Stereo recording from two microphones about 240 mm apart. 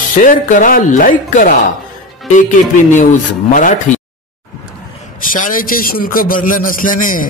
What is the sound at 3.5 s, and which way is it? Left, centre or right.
Speech, left.